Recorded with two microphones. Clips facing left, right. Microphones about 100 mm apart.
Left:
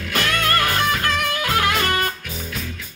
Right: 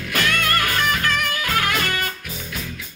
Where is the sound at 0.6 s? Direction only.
30° left (ahead or behind).